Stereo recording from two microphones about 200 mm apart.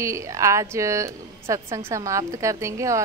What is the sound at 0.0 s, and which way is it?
A woman's voice, 15° right (ahead or behind).